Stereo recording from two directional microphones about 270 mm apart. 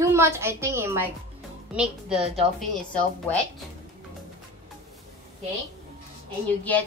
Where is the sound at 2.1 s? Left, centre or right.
Right.